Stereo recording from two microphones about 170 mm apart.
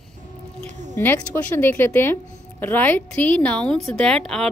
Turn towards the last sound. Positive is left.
turn(degrees=5)  # may be behind; listen again after turning